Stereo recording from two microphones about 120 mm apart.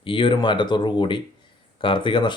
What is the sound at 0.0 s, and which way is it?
Speech, 45° left (ahead or behind).